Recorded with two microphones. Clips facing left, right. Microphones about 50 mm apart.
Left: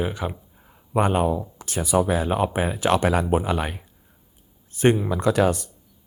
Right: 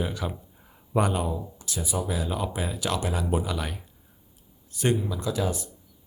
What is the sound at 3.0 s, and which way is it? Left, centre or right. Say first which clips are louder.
Speech: left 9 dB; left.